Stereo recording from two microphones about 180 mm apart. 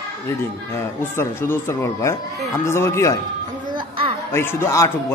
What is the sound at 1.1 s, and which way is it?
Speech, 15° left (ahead or behind).